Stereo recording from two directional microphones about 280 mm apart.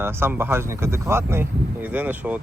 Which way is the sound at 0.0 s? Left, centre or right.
Centre.